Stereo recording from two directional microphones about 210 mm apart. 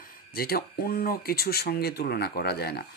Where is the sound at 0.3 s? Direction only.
45° left (ahead or behind).